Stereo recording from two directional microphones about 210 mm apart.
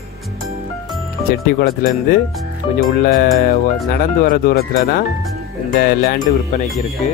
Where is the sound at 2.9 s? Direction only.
45° left (ahead or behind).